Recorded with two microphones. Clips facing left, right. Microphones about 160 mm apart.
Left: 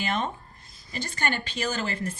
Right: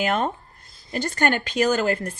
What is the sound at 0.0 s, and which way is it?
Speech, 55° right (ahead or behind).